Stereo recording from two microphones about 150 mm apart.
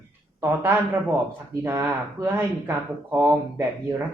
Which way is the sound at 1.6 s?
15° right (ahead or behind).